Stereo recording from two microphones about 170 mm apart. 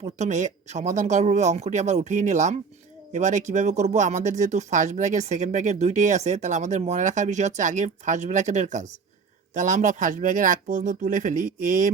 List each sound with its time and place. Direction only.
0.2 s speech: 45° right (ahead or behind)